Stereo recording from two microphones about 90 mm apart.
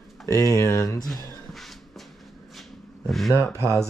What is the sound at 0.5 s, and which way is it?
Speech, 35° left (ahead or behind).